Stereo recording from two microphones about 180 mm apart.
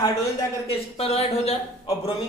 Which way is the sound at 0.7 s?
35° left (ahead or behind).